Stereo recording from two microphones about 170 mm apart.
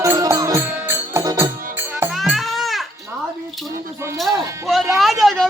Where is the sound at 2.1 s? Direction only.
Centre (ahead or behind).